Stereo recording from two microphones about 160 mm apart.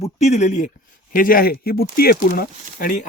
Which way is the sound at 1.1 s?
65° left (ahead or behind).